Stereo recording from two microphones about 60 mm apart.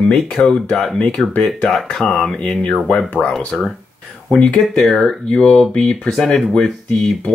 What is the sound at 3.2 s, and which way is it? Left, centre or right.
Speech, left.